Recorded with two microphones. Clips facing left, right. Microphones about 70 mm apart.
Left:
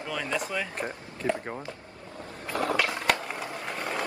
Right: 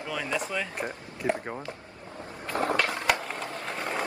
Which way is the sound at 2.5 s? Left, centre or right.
Right.